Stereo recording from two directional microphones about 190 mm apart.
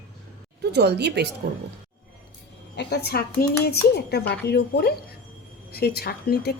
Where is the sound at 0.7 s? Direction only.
60° right (ahead or behind).